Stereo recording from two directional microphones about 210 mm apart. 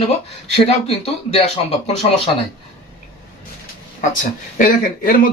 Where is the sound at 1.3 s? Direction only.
30° left (ahead or behind).